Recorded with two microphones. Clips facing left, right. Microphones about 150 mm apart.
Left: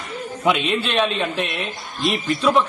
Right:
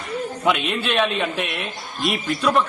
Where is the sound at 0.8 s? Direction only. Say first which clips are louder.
Even; 5° right (ahead or behind).